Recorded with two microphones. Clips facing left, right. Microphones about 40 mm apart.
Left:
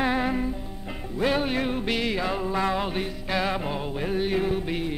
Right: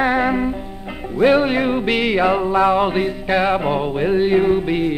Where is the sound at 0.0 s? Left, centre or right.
Right.